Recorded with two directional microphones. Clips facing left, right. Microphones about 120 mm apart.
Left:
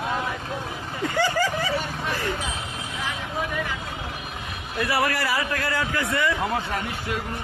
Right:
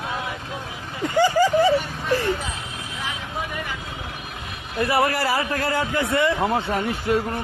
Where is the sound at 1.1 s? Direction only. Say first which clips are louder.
Right 6 dB; 15° right (ahead or behind).